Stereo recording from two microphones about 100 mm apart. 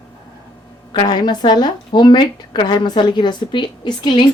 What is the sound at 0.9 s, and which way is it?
Speech, 45° left (ahead or behind).